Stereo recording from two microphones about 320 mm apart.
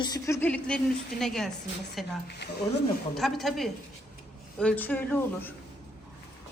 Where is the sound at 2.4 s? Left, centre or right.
Left.